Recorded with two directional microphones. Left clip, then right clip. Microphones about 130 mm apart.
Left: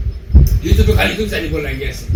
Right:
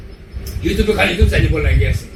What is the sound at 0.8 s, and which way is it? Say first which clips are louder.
Speech: right 1 dB; 25° left (ahead or behind).